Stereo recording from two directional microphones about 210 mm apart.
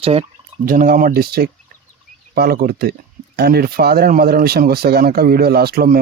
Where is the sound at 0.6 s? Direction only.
45° right (ahead or behind).